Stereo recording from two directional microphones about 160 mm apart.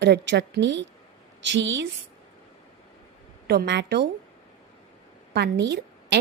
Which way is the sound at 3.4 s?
90° right.